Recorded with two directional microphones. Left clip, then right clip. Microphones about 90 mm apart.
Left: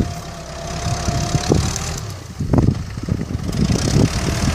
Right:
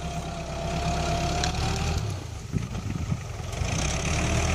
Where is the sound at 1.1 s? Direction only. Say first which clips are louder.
Left 7 dB; 45° left (ahead or behind).